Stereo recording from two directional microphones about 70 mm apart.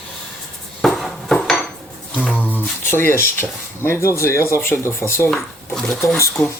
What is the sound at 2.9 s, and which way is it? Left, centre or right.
Speech, left.